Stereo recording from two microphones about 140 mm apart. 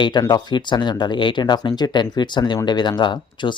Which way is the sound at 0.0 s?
30° left (ahead or behind).